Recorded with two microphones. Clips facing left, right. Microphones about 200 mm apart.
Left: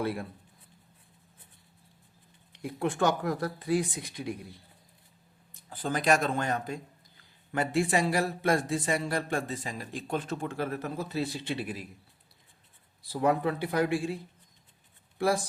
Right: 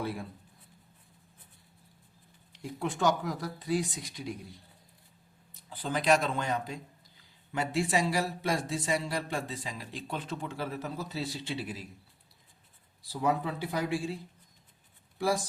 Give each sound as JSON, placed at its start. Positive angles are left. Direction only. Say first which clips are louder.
{"t": 0.0, "sound": "speech", "louder": "left 4 dB", "side_deg": 65}
{"t": 2.5, "sound": "speech", "louder": "left 4 dB", "side_deg": 60}
{"t": 5.6, "sound": "speech", "louder": "left 1 dB", "side_deg": 45}
{"t": 13.0, "sound": "speech", "louder": "left 3 dB", "side_deg": 55}